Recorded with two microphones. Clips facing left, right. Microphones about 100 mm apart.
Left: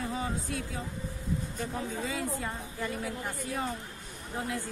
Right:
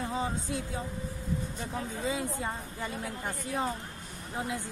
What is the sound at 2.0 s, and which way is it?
Speech, 20° right (ahead or behind).